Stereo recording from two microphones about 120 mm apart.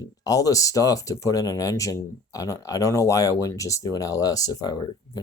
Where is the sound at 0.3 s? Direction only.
30° left (ahead or behind).